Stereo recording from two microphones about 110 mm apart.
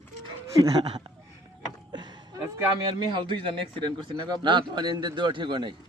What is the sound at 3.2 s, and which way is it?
A man's voice, 45° right (ahead or behind).